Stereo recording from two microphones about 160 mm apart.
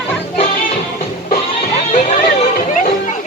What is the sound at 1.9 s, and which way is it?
Music, 55° left (ahead or behind).